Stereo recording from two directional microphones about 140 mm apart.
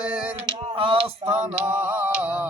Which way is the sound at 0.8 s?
40° right (ahead or behind).